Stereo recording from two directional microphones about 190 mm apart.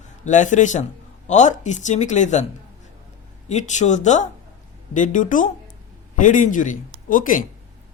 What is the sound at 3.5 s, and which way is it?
Speech, 40° left (ahead or behind).